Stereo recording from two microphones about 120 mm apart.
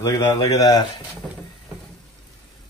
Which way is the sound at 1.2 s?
5° left (ahead or behind).